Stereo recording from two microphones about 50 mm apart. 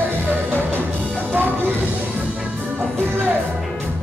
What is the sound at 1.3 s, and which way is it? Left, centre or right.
Music, right.